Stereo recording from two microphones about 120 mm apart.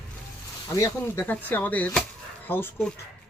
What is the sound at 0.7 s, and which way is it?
Speech, 25° left (ahead or behind).